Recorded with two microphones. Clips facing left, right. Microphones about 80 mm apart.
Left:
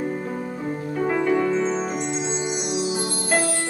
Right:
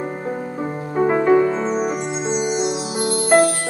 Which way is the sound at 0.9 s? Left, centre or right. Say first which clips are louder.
Right 7 dB; right.